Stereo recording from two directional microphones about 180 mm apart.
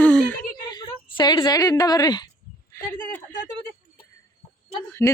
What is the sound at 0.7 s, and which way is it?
A woman's voice, 25° left (ahead or behind).